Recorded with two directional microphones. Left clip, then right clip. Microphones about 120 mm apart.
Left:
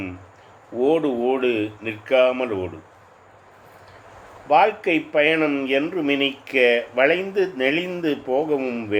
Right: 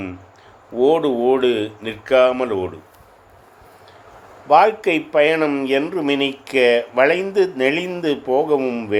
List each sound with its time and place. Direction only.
0.8 s speech: 50° right (ahead or behind)
4.4 s speech: 45° right (ahead or behind)